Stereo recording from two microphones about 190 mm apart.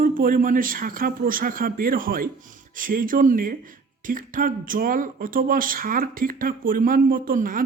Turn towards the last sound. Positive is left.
turn(degrees=-45)  # may be behind; listen again after turning